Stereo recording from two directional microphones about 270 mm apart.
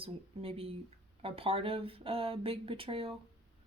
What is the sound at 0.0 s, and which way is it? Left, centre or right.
Speech, right.